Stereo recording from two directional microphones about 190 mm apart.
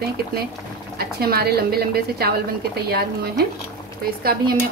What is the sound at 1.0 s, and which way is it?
A woman's voice, 55° right (ahead or behind).